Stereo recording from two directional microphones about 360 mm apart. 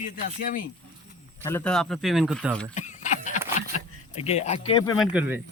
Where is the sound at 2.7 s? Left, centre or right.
Centre.